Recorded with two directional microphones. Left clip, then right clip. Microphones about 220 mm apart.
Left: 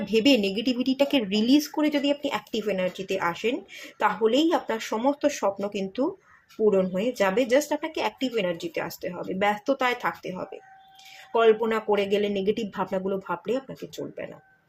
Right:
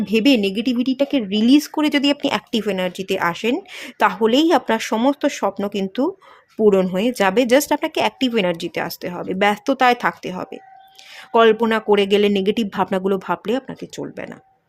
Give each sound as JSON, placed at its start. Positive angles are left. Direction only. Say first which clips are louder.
{"t": 0.0, "sound": "speech", "louder": "right 5 dB", "side_deg": -30}